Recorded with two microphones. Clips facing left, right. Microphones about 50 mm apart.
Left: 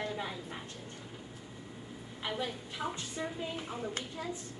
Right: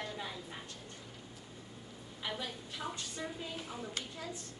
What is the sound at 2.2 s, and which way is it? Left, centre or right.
A woman's voice, centre.